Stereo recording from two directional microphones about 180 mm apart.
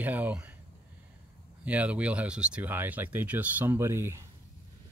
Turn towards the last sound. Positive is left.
turn(degrees=-15)  # may be behind; listen again after turning